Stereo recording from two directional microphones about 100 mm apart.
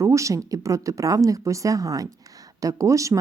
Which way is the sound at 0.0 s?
30° right (ahead or behind).